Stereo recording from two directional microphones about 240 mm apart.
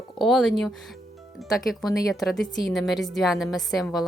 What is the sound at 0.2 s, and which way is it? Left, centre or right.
Speech, centre.